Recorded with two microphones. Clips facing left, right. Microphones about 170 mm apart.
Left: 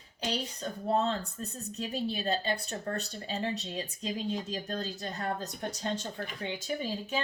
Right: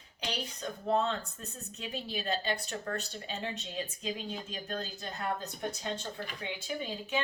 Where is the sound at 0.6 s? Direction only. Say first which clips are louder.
Even; 35° left (ahead or behind).